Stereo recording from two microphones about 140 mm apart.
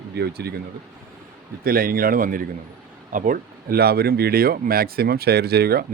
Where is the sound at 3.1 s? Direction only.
70° right (ahead or behind).